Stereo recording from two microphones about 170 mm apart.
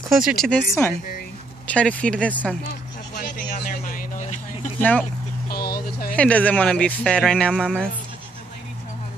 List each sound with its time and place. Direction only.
0.2 s speech: centre (ahead or behind)
3.2 s a sound: 55° left (ahead or behind)
4.7 s speech: 10° left (ahead or behind)
5.5 s vehicle: 65° left (ahead or behind)
6.1 s speech: 10° left (ahead or behind)